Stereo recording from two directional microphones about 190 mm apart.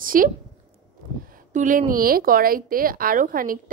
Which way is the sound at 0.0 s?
45° right (ahead or behind).